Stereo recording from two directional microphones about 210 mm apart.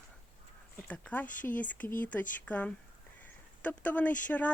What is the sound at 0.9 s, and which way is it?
Speech, 5° left (ahead or behind).